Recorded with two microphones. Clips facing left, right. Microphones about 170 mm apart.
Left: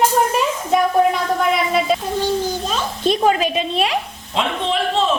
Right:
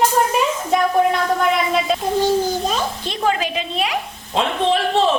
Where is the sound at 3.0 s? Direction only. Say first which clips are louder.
Left 7 dB; 20° left (ahead or behind).